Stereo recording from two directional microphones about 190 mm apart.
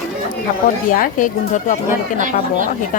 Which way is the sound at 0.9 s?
45° left (ahead or behind).